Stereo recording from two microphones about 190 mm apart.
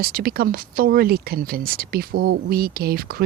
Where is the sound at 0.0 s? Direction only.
50° right (ahead or behind).